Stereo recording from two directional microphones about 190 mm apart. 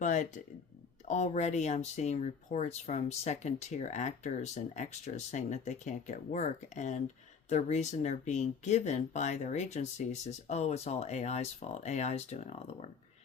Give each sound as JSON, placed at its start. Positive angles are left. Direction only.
{"t": 0.0, "sound": "speech", "side_deg": 40}